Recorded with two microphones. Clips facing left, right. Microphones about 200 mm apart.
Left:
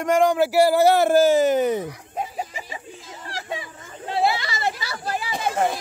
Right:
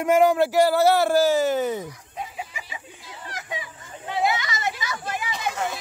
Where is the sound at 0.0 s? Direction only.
5° right (ahead or behind).